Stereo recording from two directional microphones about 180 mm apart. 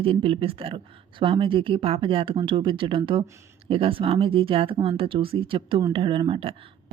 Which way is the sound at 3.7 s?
30° right (ahead or behind).